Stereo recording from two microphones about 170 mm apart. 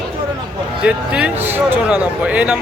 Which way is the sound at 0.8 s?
5° right (ahead or behind).